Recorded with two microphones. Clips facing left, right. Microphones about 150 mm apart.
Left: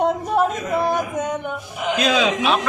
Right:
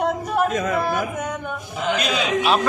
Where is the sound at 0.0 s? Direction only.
25° left (ahead or behind).